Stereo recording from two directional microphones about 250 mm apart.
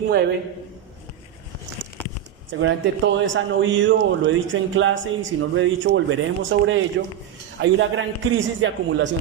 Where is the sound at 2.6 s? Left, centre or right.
Right.